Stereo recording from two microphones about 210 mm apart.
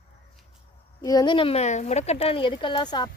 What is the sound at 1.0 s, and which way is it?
Speech, 20° left (ahead or behind).